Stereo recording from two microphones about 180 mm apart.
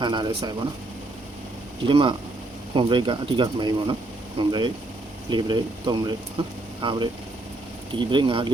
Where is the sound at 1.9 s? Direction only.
25° right (ahead or behind).